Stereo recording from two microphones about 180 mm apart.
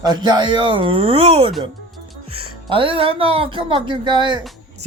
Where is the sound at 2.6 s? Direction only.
30° right (ahead or behind).